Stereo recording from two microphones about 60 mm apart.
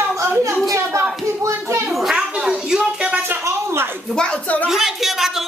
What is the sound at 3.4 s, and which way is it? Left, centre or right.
Speech, right.